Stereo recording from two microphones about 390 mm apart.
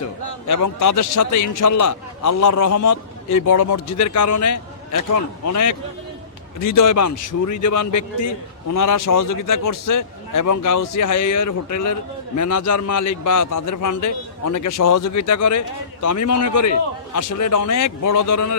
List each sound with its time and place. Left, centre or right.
0.4 s a man's voice: left